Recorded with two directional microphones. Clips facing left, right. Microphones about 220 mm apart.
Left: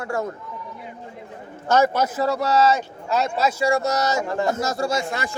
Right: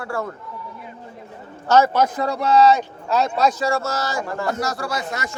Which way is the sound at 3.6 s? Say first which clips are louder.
Left 2 dB; 15° left (ahead or behind).